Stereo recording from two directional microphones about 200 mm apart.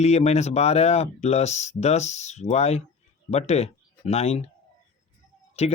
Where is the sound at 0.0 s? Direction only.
30° left (ahead or behind).